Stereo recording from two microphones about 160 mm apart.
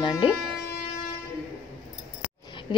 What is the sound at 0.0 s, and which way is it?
Speech, 30° left (ahead or behind).